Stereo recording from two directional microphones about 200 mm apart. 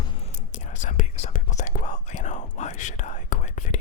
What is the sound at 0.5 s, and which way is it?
Whispering, 40° left (ahead or behind).